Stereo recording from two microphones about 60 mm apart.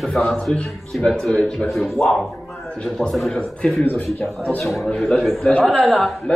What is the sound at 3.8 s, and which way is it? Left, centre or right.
Speech, left.